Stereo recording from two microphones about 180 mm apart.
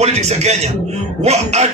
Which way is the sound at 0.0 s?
35° right (ahead or behind).